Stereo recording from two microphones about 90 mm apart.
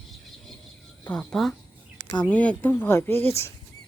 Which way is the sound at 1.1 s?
10° left (ahead or behind).